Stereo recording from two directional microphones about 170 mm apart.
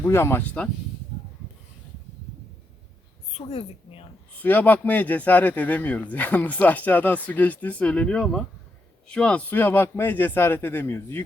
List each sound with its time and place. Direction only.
0.0 s a man's voice: 15° left (ahead or behind)
3.3 s a woman's voice: 35° left (ahead or behind)
4.4 s a man's voice: 10° left (ahead or behind)